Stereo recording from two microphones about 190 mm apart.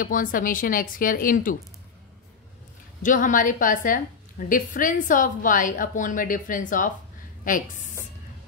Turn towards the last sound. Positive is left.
turn(degrees=45)  # may be behind; listen again after turning